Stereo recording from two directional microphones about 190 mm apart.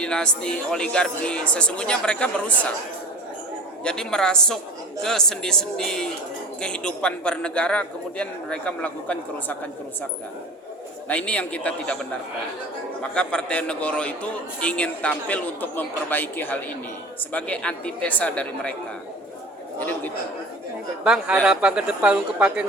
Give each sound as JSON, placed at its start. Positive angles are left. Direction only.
{"t": 0.0, "sound": "a man's voice", "side_deg": 5}
{"t": 3.8, "sound": "a man's voice", "side_deg": 5}
{"t": 11.1, "sound": "a man's voice", "side_deg": 5}
{"t": 13.0, "sound": "a man's voice", "side_deg": 5}
{"t": 21.0, "sound": "a man's voice", "side_deg": -5}